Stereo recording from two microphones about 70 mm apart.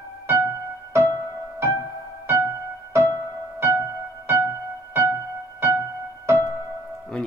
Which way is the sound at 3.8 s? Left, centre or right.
Right.